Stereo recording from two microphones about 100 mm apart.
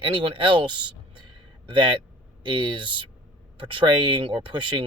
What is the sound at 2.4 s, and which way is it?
Speech, 55° right (ahead or behind).